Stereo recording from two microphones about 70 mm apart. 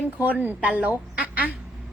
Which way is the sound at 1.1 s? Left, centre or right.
Centre.